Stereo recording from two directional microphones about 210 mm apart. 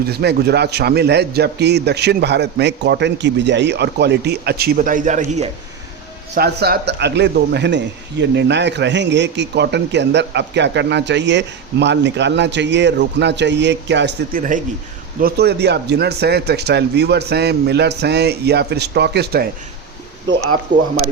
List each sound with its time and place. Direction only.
0.0 s a man's voice: 50° right (ahead or behind)
6.3 s speech: 50° right (ahead or behind)
14.3 s speech: 40° right (ahead or behind)
15.2 s a man's voice: 50° right (ahead or behind)